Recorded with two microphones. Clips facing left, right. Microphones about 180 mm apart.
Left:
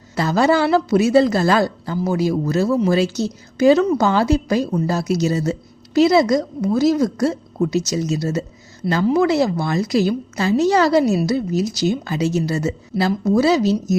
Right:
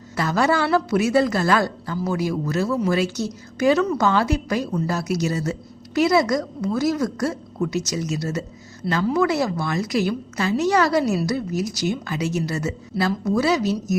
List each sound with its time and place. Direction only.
0.2 s a woman's voice: 30° left (ahead or behind)